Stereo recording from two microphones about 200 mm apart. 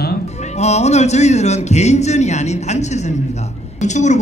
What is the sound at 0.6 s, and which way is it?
Speech, 35° left (ahead or behind).